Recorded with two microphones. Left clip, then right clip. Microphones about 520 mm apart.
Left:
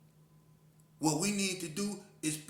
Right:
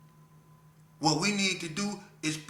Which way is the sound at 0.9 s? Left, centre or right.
Left.